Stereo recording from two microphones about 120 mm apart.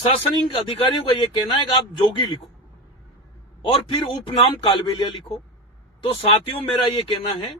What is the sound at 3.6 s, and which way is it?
Speech, 45° left (ahead or behind).